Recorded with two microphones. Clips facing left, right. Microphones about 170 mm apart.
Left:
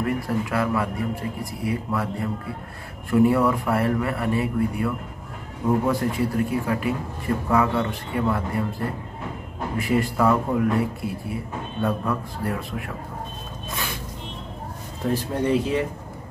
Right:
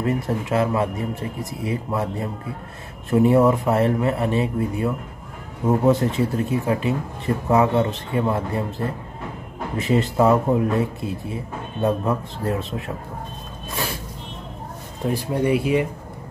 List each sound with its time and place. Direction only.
0.0 s speech: 25° right (ahead or behind)
15.0 s speech: 15° right (ahead or behind)